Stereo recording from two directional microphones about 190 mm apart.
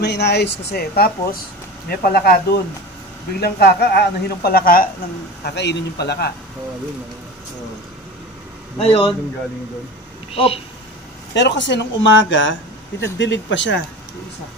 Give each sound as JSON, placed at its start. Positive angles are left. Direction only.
{"t": 0.0, "sound": "speech", "side_deg": 60}
{"t": 5.4, "sound": "speech", "side_deg": 65}
{"t": 8.7, "sound": "speech", "side_deg": 30}
{"t": 10.3, "sound": "speech", "side_deg": 30}
{"t": 11.3, "sound": "speech", "side_deg": 70}